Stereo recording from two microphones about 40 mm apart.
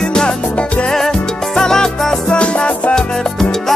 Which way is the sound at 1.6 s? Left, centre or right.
Centre.